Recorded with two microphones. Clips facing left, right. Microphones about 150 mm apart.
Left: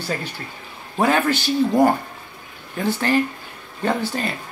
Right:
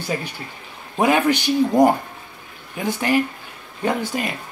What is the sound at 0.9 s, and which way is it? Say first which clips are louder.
Speech: right 1 dB; 15° right (ahead or behind).